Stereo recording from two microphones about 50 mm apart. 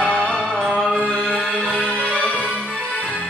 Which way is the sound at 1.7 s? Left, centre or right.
Centre.